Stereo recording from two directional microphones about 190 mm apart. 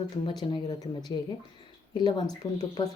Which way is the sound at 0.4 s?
25° left (ahead or behind).